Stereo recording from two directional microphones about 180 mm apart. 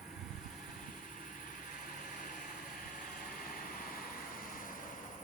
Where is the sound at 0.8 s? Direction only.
50° left (ahead or behind).